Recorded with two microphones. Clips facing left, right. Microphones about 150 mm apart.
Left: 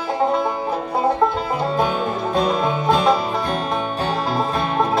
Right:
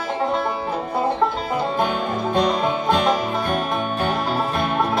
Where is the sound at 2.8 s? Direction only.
35° left (ahead or behind).